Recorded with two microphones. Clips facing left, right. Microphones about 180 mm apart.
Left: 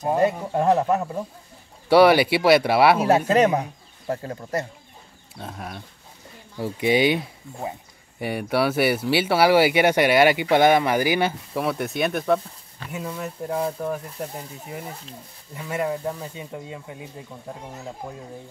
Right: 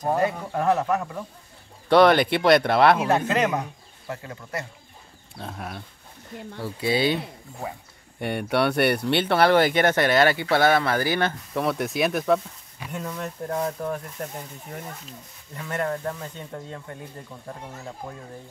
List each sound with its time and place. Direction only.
0.2 s speech: 25° left (ahead or behind)
1.9 s speech: 10° left (ahead or behind)
3.3 s speech: 30° left (ahead or behind)
5.4 s speech: centre (ahead or behind)
6.6 s speech: 15° left (ahead or behind)
8.2 s speech: centre (ahead or behind)